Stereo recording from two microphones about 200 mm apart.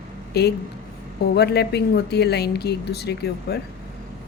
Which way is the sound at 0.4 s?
55° left (ahead or behind).